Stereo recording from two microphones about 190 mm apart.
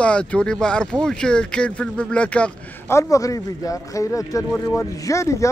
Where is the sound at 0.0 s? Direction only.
5° left (ahead or behind).